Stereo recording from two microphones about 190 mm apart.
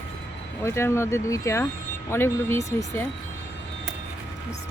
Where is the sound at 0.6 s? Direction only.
15° left (ahead or behind).